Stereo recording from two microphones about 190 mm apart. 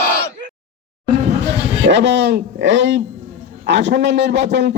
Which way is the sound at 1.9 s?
70° right (ahead or behind).